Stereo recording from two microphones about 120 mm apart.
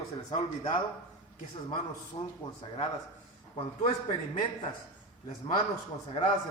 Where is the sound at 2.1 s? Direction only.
40° left (ahead or behind).